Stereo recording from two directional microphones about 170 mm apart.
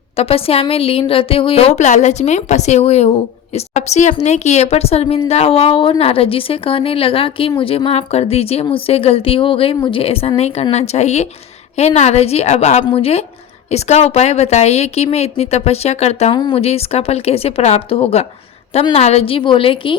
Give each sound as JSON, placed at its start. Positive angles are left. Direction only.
{"t": 0.2, "sound": "a woman's voice", "side_deg": 35}